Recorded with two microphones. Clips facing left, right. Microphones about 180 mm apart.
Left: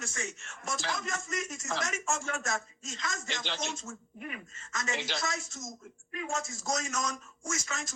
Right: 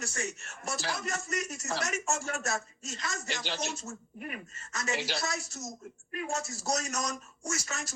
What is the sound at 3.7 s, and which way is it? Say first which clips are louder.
Speech: right 1 dB; 40° right (ahead or behind).